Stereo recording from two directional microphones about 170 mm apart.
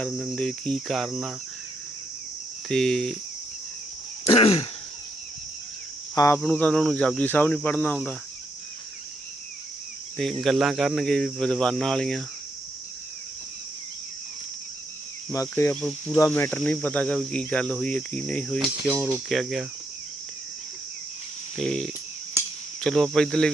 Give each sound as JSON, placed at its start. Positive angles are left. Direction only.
{"t": 0.0, "sound": "speech", "side_deg": 0}
{"t": 2.6, "sound": "speech", "side_deg": 5}
{"t": 4.3, "sound": "a sound", "side_deg": 35}
{"t": 6.1, "sound": "speech", "side_deg": 15}
{"t": 6.4, "sound": "speech", "side_deg": 5}
{"t": 10.4, "sound": "speech", "side_deg": 0}
{"t": 15.3, "sound": "speech", "side_deg": 15}
{"t": 21.6, "sound": "speech", "side_deg": 5}